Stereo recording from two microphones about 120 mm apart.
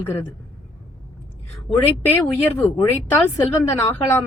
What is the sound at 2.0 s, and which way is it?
A woman's voice, 15° left (ahead or behind).